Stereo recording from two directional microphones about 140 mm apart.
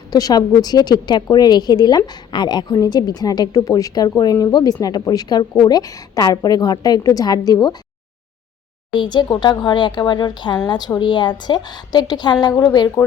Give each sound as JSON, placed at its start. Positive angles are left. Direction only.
{"t": 0.1, "sound": "a woman's voice", "side_deg": 25}
{"t": 8.9, "sound": "a woman's voice", "side_deg": 30}
{"t": 13.0, "sound": "speech", "side_deg": 10}